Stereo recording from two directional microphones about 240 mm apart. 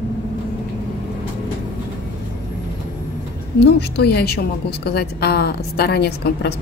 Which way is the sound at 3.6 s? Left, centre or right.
Left.